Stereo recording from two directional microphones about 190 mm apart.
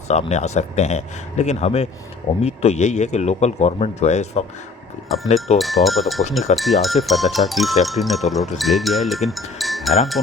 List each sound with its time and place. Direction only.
0.1 s speech: 35° left (ahead or behind)
5.5 s speech: centre (ahead or behind)